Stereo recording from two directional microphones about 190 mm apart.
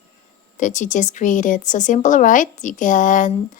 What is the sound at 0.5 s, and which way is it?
A woman's voice, 40° left (ahead or behind).